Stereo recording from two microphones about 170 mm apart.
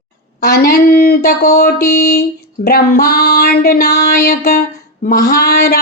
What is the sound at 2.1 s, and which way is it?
Speech, 70° left (ahead or behind).